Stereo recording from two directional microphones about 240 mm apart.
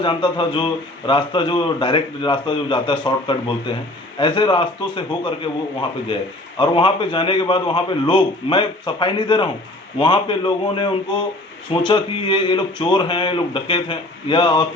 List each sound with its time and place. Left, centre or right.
0.0 s a man's voice: centre
6.6 s a man's voice: centre